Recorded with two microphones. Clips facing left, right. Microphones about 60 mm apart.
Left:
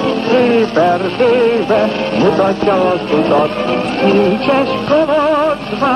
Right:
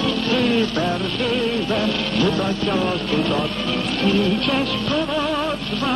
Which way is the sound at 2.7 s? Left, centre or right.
Left.